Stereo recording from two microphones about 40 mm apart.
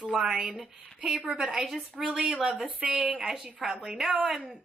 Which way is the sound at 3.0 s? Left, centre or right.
Right.